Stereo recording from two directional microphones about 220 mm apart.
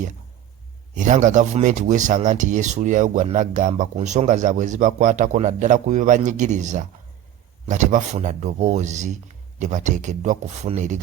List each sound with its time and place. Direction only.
0.9 s speech: 35° right (ahead or behind)